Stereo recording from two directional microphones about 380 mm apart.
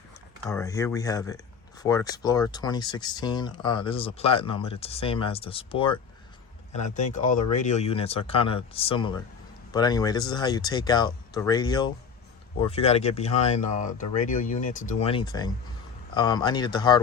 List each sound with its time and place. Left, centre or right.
0.4 s speech: centre